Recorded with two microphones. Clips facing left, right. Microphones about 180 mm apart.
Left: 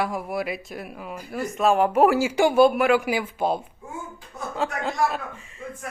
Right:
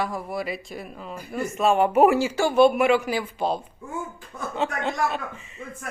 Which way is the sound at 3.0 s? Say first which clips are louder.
Left 1 dB; 10° left (ahead or behind).